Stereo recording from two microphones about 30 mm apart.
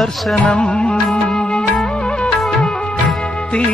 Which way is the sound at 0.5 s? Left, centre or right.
Left.